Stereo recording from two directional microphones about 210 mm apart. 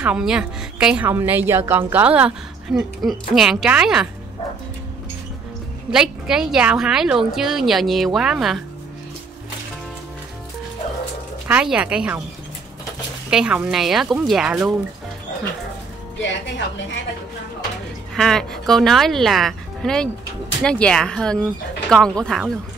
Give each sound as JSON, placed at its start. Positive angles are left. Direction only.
{"t": 0.0, "sound": "a woman's voice", "side_deg": -5}
{"t": 5.9, "sound": "a woman's voice", "side_deg": -5}
{"t": 11.4, "sound": "a woman's voice", "side_deg": -5}
{"t": 13.3, "sound": "a woman's voice", "side_deg": -5}
{"t": 16.3, "sound": "a woman's voice", "side_deg": 60}
{"t": 18.1, "sound": "a woman's voice", "side_deg": 0}